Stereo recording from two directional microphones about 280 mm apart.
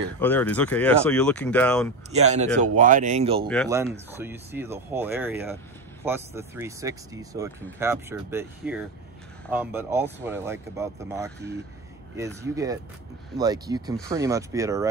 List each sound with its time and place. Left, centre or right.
0.2 s speech: centre
2.1 s speech: right
3.6 s speech: centre